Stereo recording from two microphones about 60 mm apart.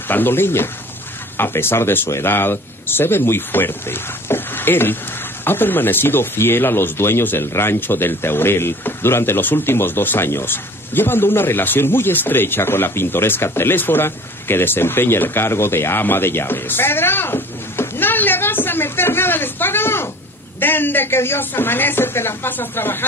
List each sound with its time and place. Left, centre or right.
0.1 s speech: left